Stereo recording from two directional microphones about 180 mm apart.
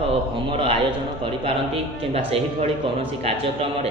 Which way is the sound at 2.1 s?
35° right (ahead or behind).